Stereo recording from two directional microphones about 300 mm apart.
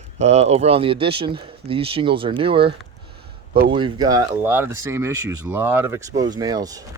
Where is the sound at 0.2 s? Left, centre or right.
Right.